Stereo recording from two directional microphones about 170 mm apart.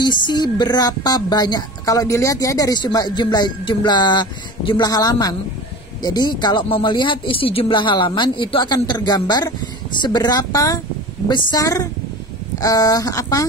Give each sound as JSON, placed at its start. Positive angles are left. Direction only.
{"t": 0.0, "sound": "a woman's voice", "side_deg": 25}